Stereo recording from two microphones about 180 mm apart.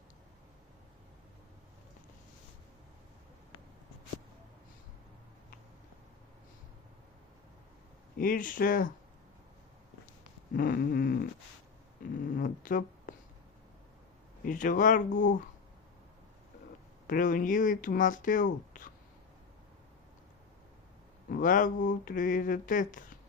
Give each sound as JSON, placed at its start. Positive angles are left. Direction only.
{"t": 8.2, "sound": "speech", "side_deg": 50}
{"t": 10.5, "sound": "a sound", "side_deg": 55}
{"t": 12.3, "sound": "a sound", "side_deg": 50}
{"t": 14.4, "sound": "speech", "side_deg": 45}
{"t": 17.1, "sound": "speech", "side_deg": 50}
{"t": 21.2, "sound": "speech", "side_deg": 50}